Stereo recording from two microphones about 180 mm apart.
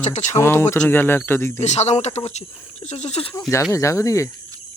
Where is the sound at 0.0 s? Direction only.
40° left (ahead or behind).